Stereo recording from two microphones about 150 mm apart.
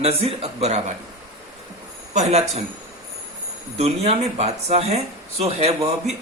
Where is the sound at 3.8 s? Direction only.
45° right (ahead or behind).